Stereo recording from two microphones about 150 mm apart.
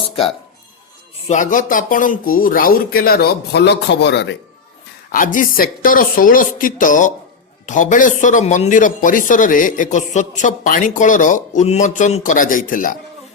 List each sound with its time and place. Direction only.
1.3 s speech: 60° left (ahead or behind); by 3.7 s 90° left
5.1 s speech: 65° left (ahead or behind)